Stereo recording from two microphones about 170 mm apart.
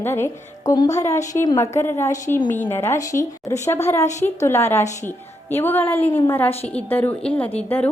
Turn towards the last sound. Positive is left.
turn(degrees=10)  # may be behind; listen again after turning